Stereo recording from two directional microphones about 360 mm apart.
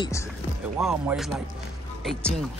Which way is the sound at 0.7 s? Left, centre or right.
Centre.